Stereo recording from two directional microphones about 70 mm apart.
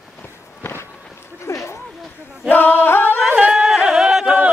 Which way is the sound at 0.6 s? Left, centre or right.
Left.